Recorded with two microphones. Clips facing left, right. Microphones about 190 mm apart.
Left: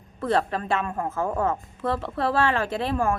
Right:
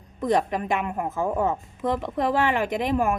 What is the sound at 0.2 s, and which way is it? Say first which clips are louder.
A woman's voice: right 1 dB; 15° right (ahead or behind).